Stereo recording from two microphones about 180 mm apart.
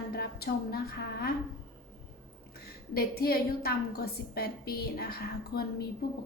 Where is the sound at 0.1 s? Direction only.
60° left (ahead or behind).